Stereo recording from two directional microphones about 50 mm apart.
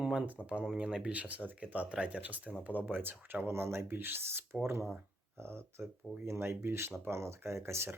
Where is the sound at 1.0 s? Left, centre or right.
Right.